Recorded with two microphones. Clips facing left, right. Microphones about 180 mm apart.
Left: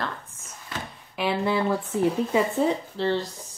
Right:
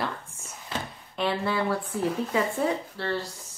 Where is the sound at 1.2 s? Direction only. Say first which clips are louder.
Left 2 dB; 15° left (ahead or behind).